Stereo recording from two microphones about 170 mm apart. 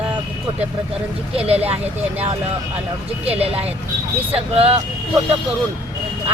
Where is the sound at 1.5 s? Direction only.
35° right (ahead or behind).